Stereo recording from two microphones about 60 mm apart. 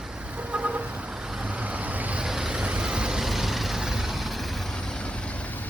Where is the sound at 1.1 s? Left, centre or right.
Centre.